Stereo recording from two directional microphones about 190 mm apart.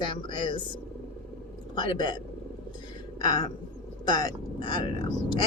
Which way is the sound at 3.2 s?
20° left (ahead or behind).